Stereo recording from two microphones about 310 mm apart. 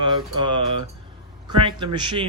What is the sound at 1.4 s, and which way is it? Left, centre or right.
Speech, centre.